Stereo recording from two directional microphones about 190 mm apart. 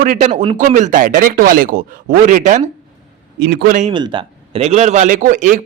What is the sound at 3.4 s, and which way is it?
Speech, 55° right (ahead or behind).